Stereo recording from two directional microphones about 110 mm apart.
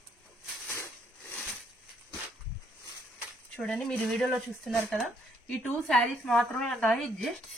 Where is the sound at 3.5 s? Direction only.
5° left (ahead or behind).